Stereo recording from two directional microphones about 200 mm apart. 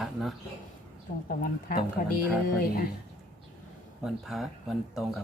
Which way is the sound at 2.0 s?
40° left (ahead or behind).